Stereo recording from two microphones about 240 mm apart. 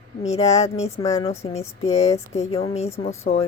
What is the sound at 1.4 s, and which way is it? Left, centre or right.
Speech, left.